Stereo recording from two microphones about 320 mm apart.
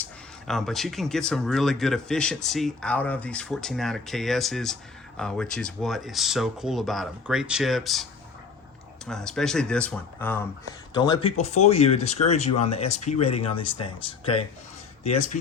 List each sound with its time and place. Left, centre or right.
0.0 s speech: centre
9.0 s speech: centre